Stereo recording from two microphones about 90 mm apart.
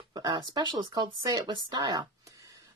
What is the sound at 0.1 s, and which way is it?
Speech, 50° right (ahead or behind).